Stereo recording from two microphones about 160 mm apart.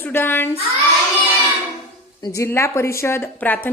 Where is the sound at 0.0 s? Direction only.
15° left (ahead or behind).